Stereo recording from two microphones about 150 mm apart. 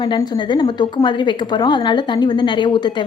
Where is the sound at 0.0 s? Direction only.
30° left (ahead or behind).